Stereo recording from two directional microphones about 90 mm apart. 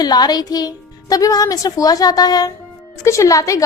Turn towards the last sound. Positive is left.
turn(degrees=40)  # may be behind; listen again after turning